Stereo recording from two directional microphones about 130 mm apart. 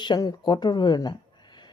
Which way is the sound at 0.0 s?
35° left (ahead or behind).